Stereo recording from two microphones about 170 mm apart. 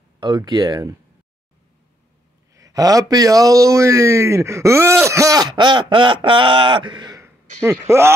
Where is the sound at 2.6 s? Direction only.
20° right (ahead or behind).